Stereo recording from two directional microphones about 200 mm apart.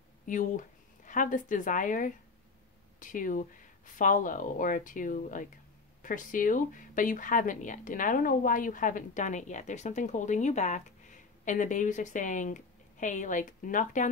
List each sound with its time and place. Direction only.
0.3 s speech: 40° left (ahead or behind)